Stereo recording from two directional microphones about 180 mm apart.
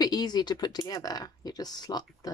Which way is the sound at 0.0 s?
20° left (ahead or behind).